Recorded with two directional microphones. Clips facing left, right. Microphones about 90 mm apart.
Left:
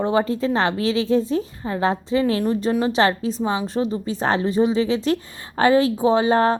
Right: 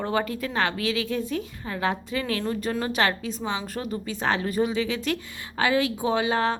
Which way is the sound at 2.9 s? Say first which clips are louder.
Left 6 dB; 35° left (ahead or behind).